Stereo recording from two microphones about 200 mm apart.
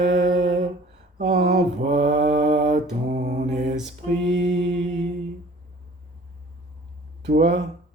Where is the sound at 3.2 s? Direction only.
55° right (ahead or behind).